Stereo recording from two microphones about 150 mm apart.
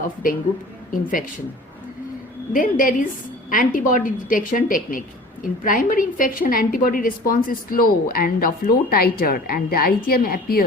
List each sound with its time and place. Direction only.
2.5 s a woman's voice: 65° left (ahead or behind); by 10.7 s 85° left